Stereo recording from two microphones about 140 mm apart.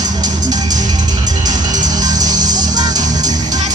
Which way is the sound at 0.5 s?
30° right (ahead or behind).